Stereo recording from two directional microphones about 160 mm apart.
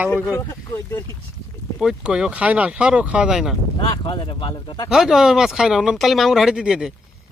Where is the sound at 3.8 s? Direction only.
30° left (ahead or behind).